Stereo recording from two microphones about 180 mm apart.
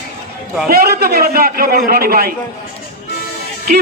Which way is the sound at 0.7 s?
60° right (ahead or behind).